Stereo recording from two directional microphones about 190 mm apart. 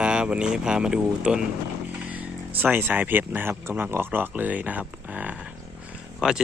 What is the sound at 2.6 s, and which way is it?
Speech, 10° right (ahead or behind).